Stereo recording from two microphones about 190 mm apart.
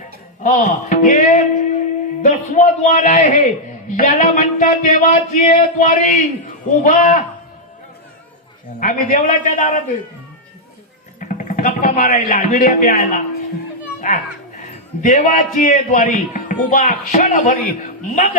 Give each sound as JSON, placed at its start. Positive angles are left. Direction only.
{"t": 0.4, "sound": "speech", "side_deg": 40}
{"t": 8.8, "sound": "speech", "side_deg": 45}
{"t": 11.2, "sound": "a man's voice", "side_deg": 45}
{"t": 14.0, "sound": "children playing", "side_deg": 40}
{"t": 15.0, "sound": "speech", "side_deg": 45}